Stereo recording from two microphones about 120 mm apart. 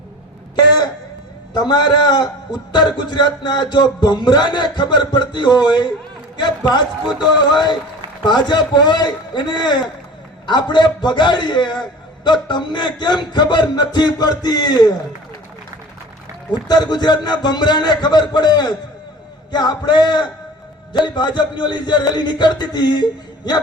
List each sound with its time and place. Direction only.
1.5 s a man's voice: 40° left (ahead or behind)
8.2 s a man's voice: 40° left (ahead or behind)
16.5 s a man's voice: 35° left (ahead or behind)